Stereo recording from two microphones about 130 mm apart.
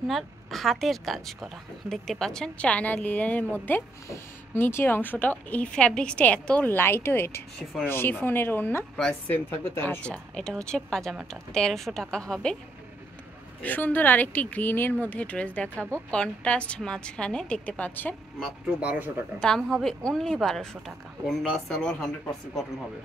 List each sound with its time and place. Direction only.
0.0 s a woman's voice: centre (ahead or behind)
8.9 s a woman's voice: 5° left (ahead or behind)
13.6 s a woman's voice: 15° left (ahead or behind)
18.4 s speech: 10° right (ahead or behind)
19.4 s a woman's voice: 5° left (ahead or behind)